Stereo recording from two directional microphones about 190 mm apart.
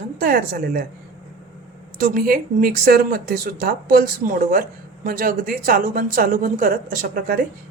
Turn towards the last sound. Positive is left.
turn(degrees=-50)  # may be behind; listen again after turning